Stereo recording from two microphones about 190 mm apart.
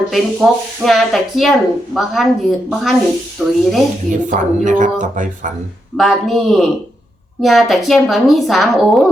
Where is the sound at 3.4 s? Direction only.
Centre (ahead or behind).